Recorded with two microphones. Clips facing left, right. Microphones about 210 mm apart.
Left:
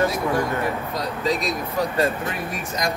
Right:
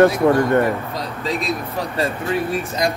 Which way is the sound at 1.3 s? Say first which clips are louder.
Right 1 dB; 30° right (ahead or behind).